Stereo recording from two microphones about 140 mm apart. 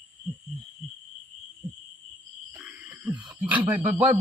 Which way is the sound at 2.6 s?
10° right (ahead or behind).